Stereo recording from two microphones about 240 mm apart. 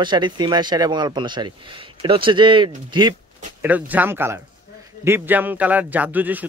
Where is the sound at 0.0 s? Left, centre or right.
Centre.